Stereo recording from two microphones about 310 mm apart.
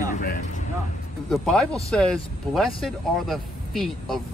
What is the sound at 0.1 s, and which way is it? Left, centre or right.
Speech, left.